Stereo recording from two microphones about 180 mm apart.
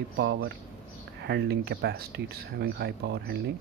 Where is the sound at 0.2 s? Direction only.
75° right (ahead or behind).